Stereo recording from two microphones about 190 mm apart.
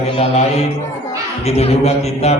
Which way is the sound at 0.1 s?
30° left (ahead or behind).